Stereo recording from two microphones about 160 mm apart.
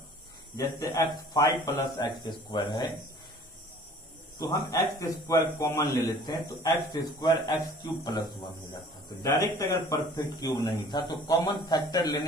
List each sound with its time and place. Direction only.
0.6 s a man's voice: 20° left (ahead or behind)
4.4 s a man's voice: 20° left (ahead or behind)